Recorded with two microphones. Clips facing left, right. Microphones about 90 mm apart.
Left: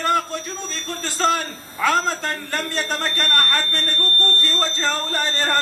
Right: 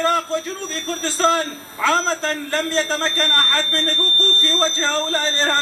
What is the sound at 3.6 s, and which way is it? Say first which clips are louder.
Speech: right 3 dB; 25° right (ahead or behind).